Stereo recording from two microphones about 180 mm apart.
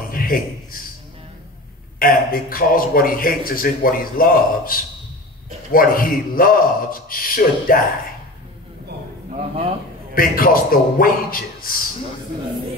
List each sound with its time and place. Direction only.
0.1 s a sound: 55° left (ahead or behind)
2.0 s a man's voice: 55° left (ahead or behind)
10.1 s a man's voice: 50° left (ahead or behind)